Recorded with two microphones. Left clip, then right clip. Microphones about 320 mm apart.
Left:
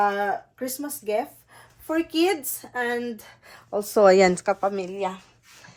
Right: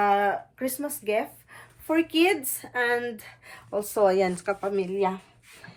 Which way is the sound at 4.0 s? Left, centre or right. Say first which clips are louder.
Left 6 dB; left.